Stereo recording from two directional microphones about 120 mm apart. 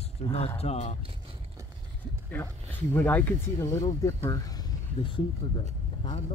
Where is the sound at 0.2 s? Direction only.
60° left (ahead or behind).